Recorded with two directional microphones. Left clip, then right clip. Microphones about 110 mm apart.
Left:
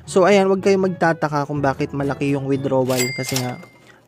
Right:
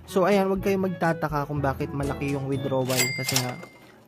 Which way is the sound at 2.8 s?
Centre (ahead or behind).